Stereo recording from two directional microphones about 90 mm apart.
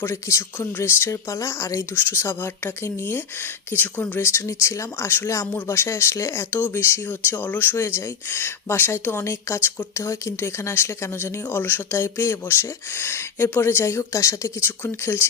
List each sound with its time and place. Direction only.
0.0 s speech: 30° left (ahead or behind)